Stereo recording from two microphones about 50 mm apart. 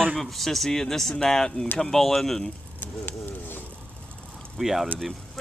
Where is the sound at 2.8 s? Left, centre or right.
Left.